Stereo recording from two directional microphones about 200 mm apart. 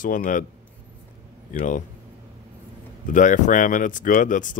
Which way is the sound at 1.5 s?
40° left (ahead or behind).